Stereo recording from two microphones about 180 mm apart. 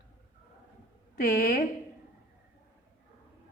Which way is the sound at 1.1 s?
55° left (ahead or behind).